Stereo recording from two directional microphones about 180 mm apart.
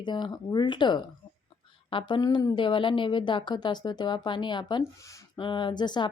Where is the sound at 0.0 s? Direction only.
25° left (ahead or behind).